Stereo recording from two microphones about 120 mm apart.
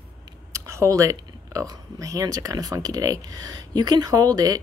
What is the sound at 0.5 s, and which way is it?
Speech, 25° right (ahead or behind).